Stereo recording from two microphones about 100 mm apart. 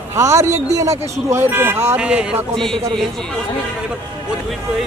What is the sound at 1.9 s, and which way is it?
Speech, 10° right (ahead or behind).